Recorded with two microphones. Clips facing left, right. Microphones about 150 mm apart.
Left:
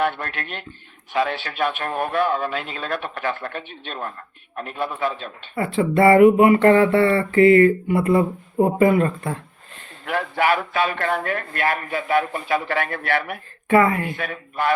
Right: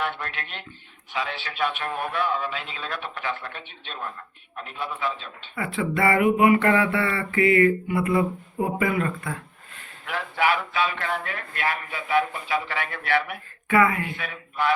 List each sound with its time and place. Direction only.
0.0 s speech: 50° left (ahead or behind); by 6.2 s 30° left (ahead or behind)
6.3 s mantra: 35° left (ahead or behind)
10.1 s speech: 50° left (ahead or behind)
13.7 s speech: 35° left (ahead or behind)